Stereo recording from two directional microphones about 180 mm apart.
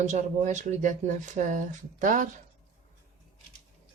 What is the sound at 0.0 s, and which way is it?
A woman's voice, 40° right (ahead or behind).